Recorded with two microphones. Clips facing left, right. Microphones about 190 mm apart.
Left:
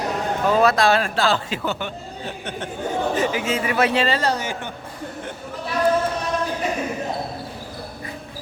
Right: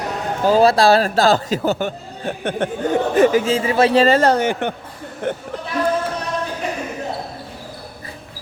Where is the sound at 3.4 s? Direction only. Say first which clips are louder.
Right 5 dB; 30° right (ahead or behind); by 4.7 s 60° right (ahead or behind).